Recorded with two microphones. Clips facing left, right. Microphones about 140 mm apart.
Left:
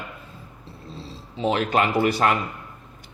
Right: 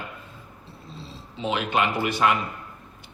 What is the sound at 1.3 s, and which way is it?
Speech, 40° left (ahead or behind).